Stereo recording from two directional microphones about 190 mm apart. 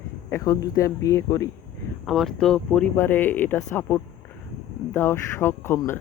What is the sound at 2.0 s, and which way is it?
Speech, centre (ahead or behind).